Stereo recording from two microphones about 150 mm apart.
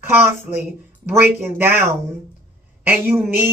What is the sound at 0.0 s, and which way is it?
Speech, 15° right (ahead or behind).